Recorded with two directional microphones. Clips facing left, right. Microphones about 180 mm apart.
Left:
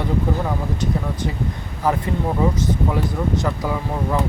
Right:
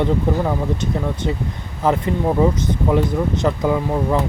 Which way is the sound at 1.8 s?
20° right (ahead or behind).